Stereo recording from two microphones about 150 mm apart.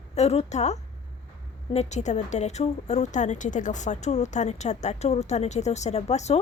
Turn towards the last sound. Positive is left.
turn(degrees=50)  # may be behind; listen again after turning